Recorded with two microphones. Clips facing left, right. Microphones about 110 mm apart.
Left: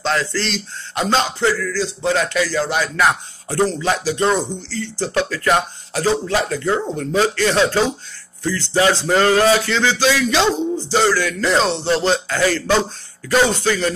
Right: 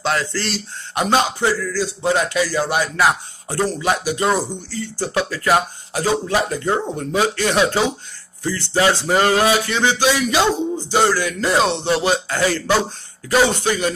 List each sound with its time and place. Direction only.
0.2 s speech: 50° right (ahead or behind)
0.9 s speech: 15° right (ahead or behind)
9.0 s speech: 15° right (ahead or behind)